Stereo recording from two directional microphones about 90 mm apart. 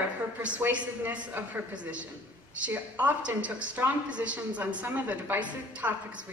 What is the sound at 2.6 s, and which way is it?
A woman's voice, 20° right (ahead or behind).